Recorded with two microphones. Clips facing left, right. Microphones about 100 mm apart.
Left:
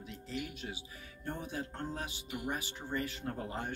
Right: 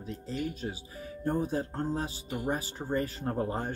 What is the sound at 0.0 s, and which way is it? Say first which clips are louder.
Speech: right 7 dB; 35° right (ahead or behind).